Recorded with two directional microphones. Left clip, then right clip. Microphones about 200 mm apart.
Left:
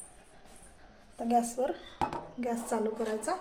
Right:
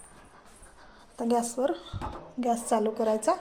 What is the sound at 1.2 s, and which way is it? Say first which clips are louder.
A woman's voice: right 2 dB; 35° right (ahead or behind).